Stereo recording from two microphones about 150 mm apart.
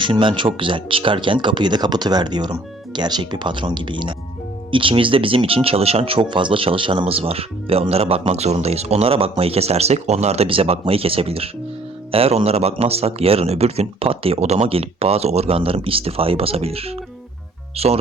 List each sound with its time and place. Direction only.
0.0 s speech: 35° right (ahead or behind)